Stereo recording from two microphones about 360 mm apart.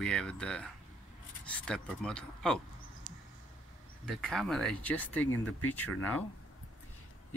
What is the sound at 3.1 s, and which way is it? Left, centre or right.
Mouse, right.